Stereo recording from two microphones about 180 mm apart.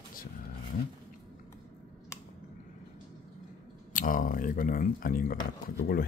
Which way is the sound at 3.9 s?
50° left (ahead or behind).